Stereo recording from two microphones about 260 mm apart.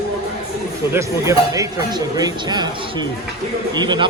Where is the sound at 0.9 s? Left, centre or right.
Centre.